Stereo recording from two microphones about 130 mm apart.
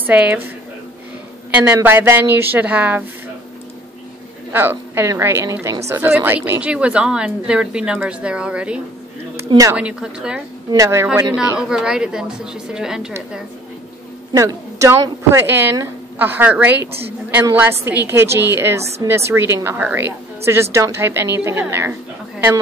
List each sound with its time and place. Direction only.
0.0 s speech: 10° right (ahead or behind)
1.5 s speech: 20° right (ahead or behind)
4.5 s a woman's voice: 15° right (ahead or behind)
10.7 s a woman's voice: 20° right (ahead or behind)
11.7 s a woman's voice: 5° right (ahead or behind)
14.3 s a woman's voice: 25° right (ahead or behind)